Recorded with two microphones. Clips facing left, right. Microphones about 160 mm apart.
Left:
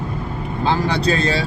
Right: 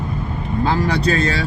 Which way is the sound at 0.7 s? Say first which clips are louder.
Left 1 dB; 30° left (ahead or behind).